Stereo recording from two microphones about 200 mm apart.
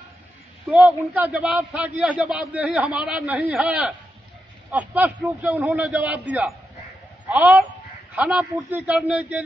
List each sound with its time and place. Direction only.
0.7 s a man's voice: 5° right (ahead or behind)